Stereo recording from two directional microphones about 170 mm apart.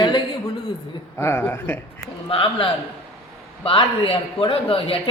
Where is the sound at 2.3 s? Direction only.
30° left (ahead or behind).